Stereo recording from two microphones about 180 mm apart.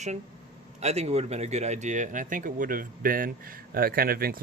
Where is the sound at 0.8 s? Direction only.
35° right (ahead or behind).